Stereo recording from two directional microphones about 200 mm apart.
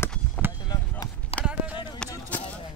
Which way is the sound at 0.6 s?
20° left (ahead or behind).